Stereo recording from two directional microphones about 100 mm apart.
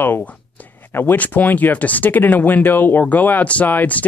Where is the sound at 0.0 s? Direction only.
20° left (ahead or behind).